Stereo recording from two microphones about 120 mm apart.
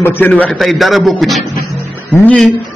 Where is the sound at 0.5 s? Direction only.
Centre (ahead or behind).